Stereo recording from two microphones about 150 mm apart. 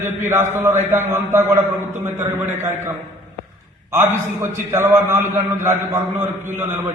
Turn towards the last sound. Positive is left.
turn(degrees=-15)  # may be behind; listen again after turning